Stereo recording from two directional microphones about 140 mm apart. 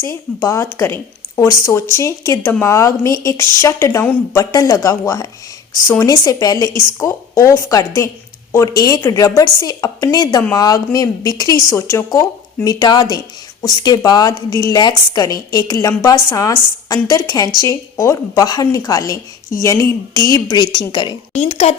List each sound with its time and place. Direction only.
0.0 s a woman's voice: 20° left (ahead or behind)
21.4 s speech: 45° left (ahead or behind)